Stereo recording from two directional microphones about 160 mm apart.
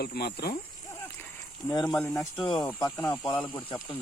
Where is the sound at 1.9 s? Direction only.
5° left (ahead or behind).